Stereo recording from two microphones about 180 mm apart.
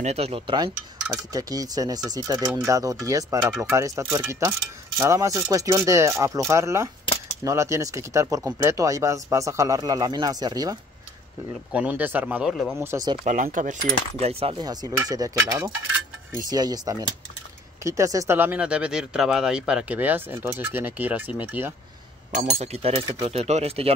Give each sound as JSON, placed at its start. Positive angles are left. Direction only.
{"t": 0.0, "sound": "speech", "side_deg": -35}
{"t": 11.7, "sound": "speech", "side_deg": -10}
{"t": 12.8, "sound": "speech", "side_deg": -20}
{"t": 13.2, "sound": "speech", "side_deg": -45}
{"t": 14.1, "sound": "speech", "side_deg": -35}
{"t": 22.3, "sound": "speech", "side_deg": -40}